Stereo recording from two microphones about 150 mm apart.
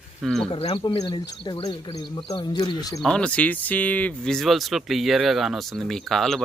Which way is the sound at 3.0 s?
5° left (ahead or behind).